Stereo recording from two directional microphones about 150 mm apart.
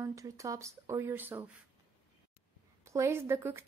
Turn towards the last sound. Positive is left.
turn(degrees=-15)  # may be behind; listen again after turning